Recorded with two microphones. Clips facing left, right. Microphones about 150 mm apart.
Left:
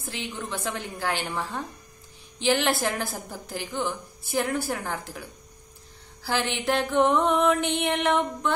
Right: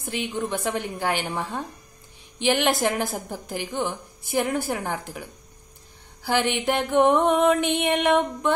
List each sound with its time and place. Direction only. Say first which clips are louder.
0.0 s a woman's voice: right 6 dB; 15° right (ahead or behind)
6.2 s a woman's voice: right 4 dB; 15° right (ahead or behind)